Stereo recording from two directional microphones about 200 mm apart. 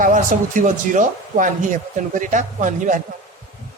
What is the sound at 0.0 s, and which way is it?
Speech, 40° right (ahead or behind).